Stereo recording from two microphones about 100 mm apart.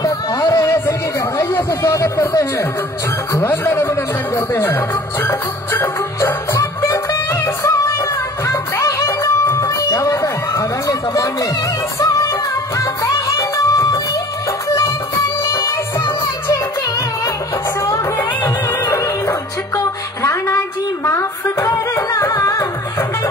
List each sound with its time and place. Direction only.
0.0 s a sound: 40° left (ahead or behind)
0.7 s a sound: 20° left (ahead or behind)
1.7 s speech: 35° left (ahead or behind)
7.4 s music: 30° left (ahead or behind)
12.7 s music: 35° left (ahead or behind)
15.4 s music: 30° left (ahead or behind)
18.4 s music: 30° left (ahead or behind)